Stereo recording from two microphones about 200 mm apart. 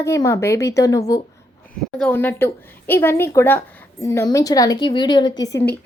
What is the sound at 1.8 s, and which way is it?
A woman's voice, 5° left (ahead or behind).